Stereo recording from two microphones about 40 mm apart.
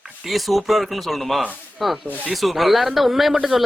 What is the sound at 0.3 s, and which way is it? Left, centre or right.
Speech, centre.